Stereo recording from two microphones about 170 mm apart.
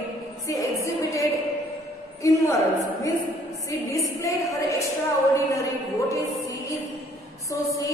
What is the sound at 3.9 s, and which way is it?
A woman's voice, 20° left (ahead or behind).